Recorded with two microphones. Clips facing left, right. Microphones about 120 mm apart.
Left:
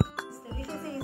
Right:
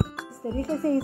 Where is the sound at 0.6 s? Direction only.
45° right (ahead or behind).